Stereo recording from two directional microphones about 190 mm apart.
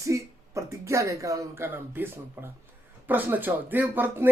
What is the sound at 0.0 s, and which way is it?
Speech, 15° right (ahead or behind).